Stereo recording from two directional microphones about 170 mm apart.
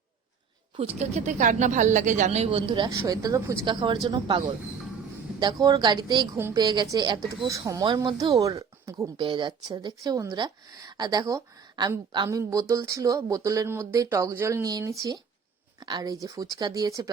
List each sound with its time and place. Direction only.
0.8 s speech: 40° right (ahead or behind); by 17.1 s 20° right (ahead or behind)